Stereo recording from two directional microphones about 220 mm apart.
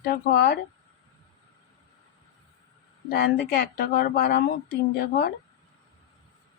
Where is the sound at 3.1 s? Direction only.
45° left (ahead or behind).